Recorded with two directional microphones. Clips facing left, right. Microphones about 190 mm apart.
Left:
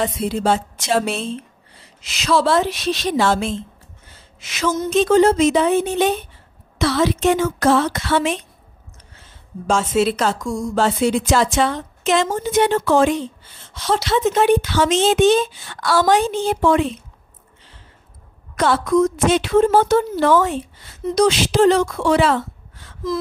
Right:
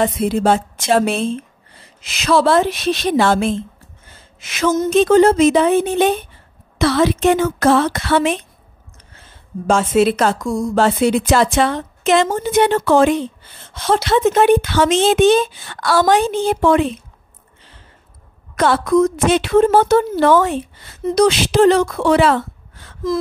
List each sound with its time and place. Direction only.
0.0 s a woman's voice: 55° right (ahead or behind)
9.7 s a woman's voice: 55° right (ahead or behind)
18.6 s a woman's voice: 60° right (ahead or behind)